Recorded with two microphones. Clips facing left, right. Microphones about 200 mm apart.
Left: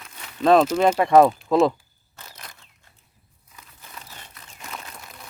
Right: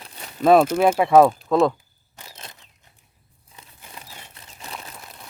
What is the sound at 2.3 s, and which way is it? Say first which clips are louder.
Crunch: right 2 dB; 20° right (ahead or behind).